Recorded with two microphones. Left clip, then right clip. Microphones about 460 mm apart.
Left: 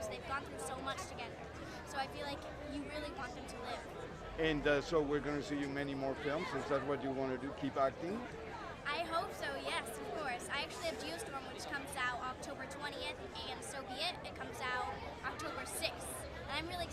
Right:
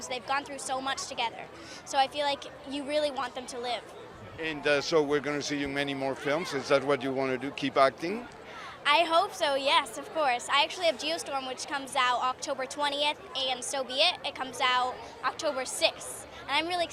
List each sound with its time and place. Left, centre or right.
0.1 s a woman's voice: right
4.6 s speech: centre
8.8 s a woman's voice: right